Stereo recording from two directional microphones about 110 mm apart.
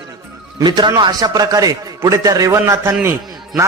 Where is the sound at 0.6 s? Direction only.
40° right (ahead or behind).